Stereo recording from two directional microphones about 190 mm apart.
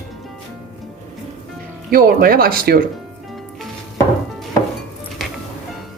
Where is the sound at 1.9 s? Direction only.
50° right (ahead or behind).